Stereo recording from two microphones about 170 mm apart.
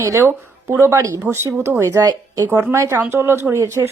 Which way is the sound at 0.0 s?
15° right (ahead or behind).